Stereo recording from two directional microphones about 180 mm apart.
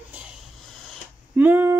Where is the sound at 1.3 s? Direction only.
10° right (ahead or behind).